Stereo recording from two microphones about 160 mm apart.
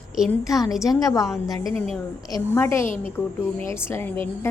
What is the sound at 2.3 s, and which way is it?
A woman's voice, 15° left (ahead or behind).